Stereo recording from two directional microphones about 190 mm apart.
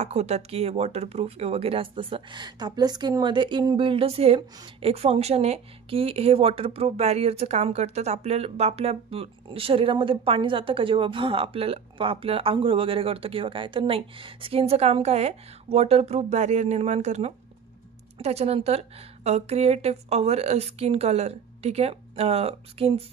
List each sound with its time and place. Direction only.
0.0 s a woman's voice: 35° right (ahead or behind)